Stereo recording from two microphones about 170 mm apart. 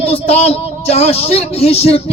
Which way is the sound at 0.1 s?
35° left (ahead or behind).